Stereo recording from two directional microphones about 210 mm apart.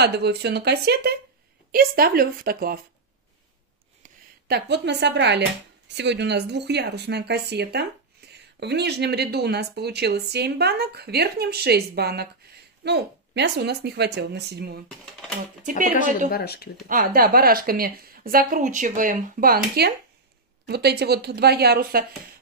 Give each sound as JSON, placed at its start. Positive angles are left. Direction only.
{"t": 0.0, "sound": "speech", "side_deg": -50}
{"t": 4.5, "sound": "speech", "side_deg": -50}
{"t": 16.3, "sound": "speech", "side_deg": 45}
{"t": 16.8, "sound": "speech", "side_deg": -40}